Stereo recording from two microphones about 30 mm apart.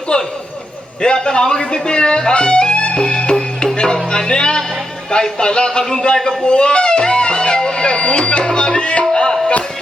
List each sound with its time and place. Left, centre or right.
0.1 s a sound: left
1.0 s a man's voice: left
3.1 s music: left
3.9 s a man's voice: left
6.4 s music: left